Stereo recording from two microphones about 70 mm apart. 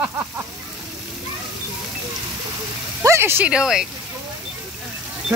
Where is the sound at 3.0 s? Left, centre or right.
Right.